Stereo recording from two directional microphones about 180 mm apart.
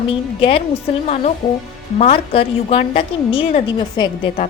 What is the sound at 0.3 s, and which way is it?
A woman's voice, 30° left (ahead or behind).